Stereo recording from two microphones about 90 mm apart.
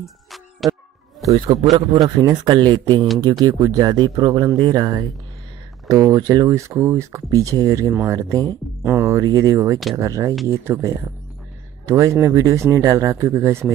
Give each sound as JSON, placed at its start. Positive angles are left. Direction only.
{"t": 0.0, "sound": "music", "side_deg": 0}
{"t": 1.3, "sound": "a man's voice", "side_deg": -65}
{"t": 1.7, "sound": "a man's voice", "side_deg": -50}
{"t": 6.1, "sound": "speech", "side_deg": -45}
{"t": 7.2, "sound": "speech", "side_deg": -40}
{"t": 8.8, "sound": "speech", "side_deg": -30}
{"t": 11.9, "sound": "speech", "side_deg": -35}